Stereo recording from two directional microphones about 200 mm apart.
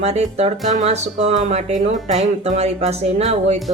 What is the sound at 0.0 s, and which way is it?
Speech, 30° right (ahead or behind).